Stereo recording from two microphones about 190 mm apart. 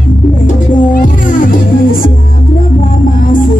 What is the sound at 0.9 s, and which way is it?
Music, 45° left (ahead or behind).